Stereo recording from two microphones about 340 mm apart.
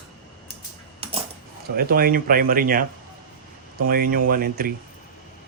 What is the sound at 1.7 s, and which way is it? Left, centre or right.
Speech, right.